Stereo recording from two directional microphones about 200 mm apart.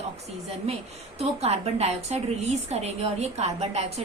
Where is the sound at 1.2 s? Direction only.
30° right (ahead or behind).